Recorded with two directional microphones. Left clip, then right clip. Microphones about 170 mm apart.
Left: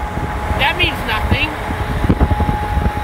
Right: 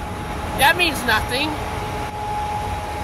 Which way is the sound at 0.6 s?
20° right (ahead or behind).